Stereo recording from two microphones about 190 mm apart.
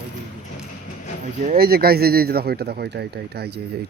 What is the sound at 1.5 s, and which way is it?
Speech, 55° right (ahead or behind).